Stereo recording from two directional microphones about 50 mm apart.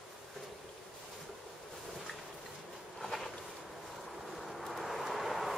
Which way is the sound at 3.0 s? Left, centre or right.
Centre.